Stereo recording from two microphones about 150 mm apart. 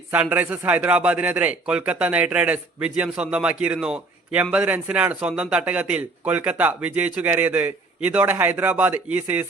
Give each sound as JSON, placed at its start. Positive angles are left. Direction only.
{"t": 0.1, "sound": "a man's voice", "side_deg": -10}